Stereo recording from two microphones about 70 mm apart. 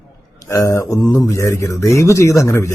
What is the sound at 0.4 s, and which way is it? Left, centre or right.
Speech, left.